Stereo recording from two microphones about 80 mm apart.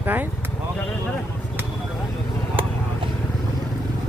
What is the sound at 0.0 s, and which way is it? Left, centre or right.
Speech, right.